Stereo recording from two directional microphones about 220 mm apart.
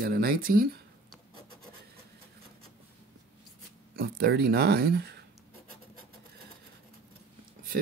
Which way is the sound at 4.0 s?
45° right (ahead or behind).